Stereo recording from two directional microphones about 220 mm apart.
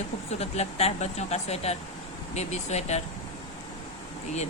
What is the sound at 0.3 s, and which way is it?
Speech, 30° left (ahead or behind).